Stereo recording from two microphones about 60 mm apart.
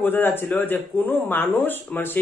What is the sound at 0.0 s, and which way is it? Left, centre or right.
Speech, left.